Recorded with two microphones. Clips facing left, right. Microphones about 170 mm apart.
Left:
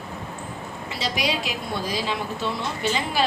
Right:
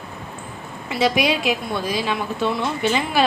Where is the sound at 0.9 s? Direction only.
60° right (ahead or behind).